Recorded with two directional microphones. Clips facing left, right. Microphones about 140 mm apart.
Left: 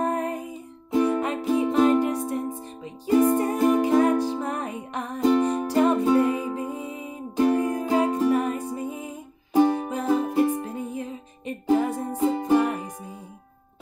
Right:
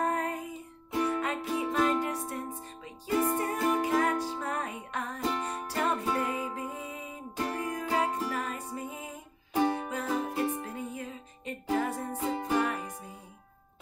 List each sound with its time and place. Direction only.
0.0 s music: 20° left (ahead or behind)